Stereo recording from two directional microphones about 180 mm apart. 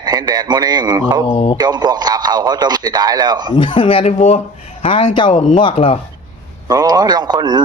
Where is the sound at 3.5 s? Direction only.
25° left (ahead or behind).